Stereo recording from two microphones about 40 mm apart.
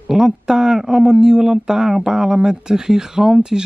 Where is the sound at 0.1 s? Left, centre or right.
Centre.